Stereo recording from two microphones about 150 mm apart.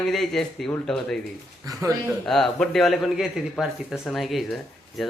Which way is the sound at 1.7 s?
25° right (ahead or behind).